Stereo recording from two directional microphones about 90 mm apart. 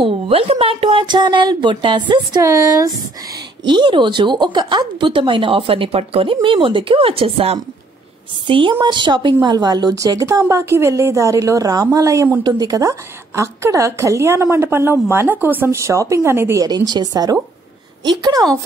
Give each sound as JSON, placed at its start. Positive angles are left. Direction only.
{"t": 0.0, "sound": "speech", "side_deg": -90}
{"t": 2.4, "sound": "a woman's voice", "side_deg": -40}
{"t": 3.6, "sound": "speech", "side_deg": -60}
{"t": 6.4, "sound": "speech", "side_deg": -75}
{"t": 8.5, "sound": "a woman's voice", "side_deg": -65}
{"t": 16.6, "sound": "a woman's voice", "side_deg": -50}